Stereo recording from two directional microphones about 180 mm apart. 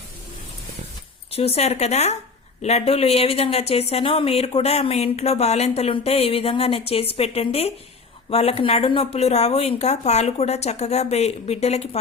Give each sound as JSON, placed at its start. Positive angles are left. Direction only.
{"t": 1.3, "sound": "speech", "side_deg": 35}